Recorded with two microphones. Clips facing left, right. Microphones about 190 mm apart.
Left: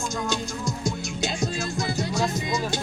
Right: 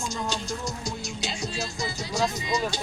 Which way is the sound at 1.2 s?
55° left (ahead or behind).